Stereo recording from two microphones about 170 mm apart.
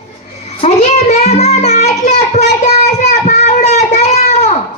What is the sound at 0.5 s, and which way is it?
Music, 40° left (ahead or behind).